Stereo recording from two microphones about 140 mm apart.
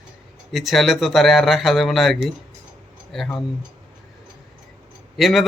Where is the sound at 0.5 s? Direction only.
Centre (ahead or behind).